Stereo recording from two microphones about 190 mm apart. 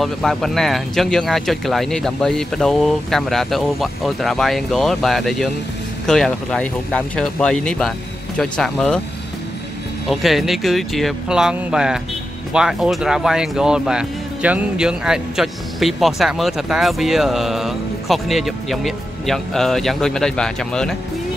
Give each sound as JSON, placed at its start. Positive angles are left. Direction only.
{"t": 0.0, "sound": "speech", "side_deg": 0}
{"t": 10.0, "sound": "speech", "side_deg": 0}